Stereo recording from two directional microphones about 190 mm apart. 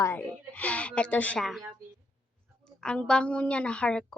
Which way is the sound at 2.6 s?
5° left (ahead or behind).